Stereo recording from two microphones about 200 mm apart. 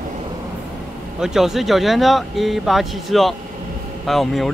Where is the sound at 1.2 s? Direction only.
Centre (ahead or behind).